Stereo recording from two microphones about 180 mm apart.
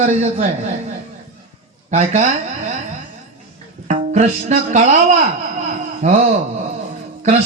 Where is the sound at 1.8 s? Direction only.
40° right (ahead or behind).